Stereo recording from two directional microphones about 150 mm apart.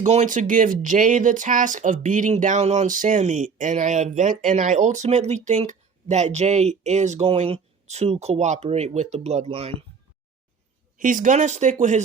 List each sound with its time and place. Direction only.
0.0 s speech: 55° right (ahead or behind)
10.9 s speech: 60° right (ahead or behind)